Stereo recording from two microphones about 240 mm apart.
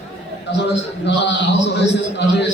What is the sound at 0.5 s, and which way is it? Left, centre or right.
A man's voice, left.